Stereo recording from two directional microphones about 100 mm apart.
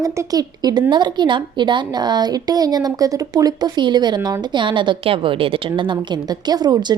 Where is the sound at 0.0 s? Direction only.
35° right (ahead or behind).